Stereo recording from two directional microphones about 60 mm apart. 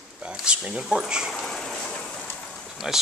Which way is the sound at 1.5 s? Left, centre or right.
Centre.